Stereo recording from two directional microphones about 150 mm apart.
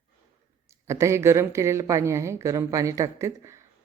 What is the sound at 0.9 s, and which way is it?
Speech, 20° right (ahead or behind).